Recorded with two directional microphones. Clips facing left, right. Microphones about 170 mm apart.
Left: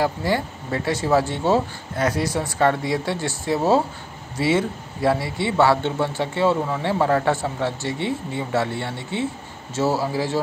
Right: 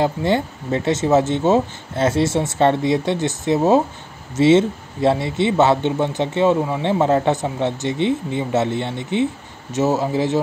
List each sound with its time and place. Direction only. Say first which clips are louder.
0.0 s speech: right 3 dB; 20° right (ahead or behind)